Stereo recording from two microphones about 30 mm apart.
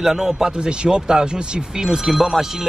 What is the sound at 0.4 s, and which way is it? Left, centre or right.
Speech, right.